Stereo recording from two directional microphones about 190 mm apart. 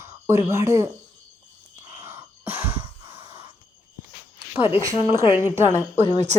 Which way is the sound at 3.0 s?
30° right (ahead or behind).